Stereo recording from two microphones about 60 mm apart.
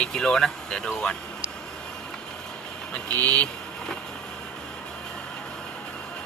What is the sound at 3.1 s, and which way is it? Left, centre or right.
Speech, left.